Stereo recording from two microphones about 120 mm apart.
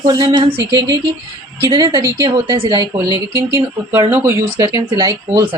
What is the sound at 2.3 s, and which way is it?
Speech, 40° right (ahead or behind).